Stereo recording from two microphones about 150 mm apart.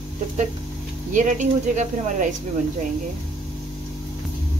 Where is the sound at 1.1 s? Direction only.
55° right (ahead or behind).